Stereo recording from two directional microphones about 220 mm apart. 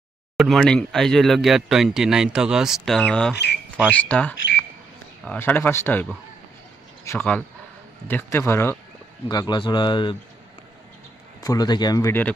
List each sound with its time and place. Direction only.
0.4 s speech: centre (ahead or behind); by 10.1 s 20° left (ahead or behind)
11.4 s speech: 15° left (ahead or behind)